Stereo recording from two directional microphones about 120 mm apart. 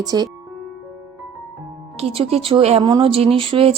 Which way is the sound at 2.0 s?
55° right (ahead or behind).